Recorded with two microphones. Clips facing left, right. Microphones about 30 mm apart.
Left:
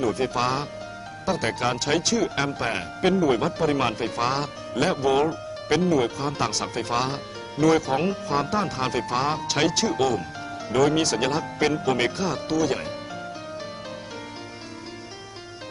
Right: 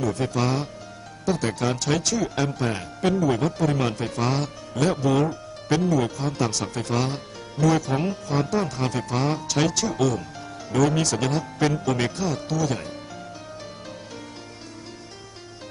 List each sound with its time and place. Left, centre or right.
0.0 s speech: centre